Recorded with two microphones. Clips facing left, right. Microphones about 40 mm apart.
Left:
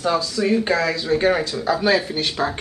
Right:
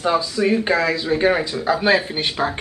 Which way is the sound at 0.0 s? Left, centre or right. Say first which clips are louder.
Right 2 dB; right.